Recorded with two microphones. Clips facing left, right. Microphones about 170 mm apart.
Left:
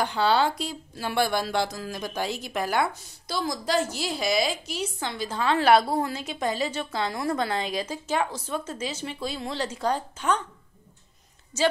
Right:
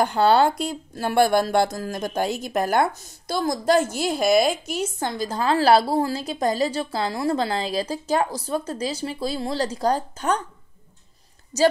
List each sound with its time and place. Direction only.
0.0 s speech: 50° right (ahead or behind)
11.5 s a woman's voice: 40° right (ahead or behind)